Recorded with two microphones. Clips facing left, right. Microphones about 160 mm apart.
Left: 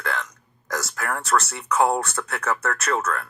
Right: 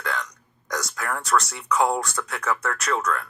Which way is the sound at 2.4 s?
40° left (ahead or behind).